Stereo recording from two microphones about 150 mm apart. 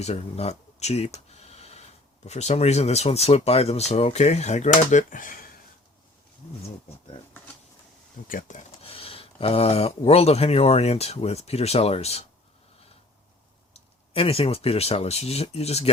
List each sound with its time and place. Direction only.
0.0 s a sound: 45° left (ahead or behind)
2.2 s speech: 50° left (ahead or behind); by 5.5 s 65° left (ahead or behind)
8.3 s speech: 60° left (ahead or behind)
8.8 s speech: 40° left (ahead or behind)
13.7 s speech: 40° left (ahead or behind)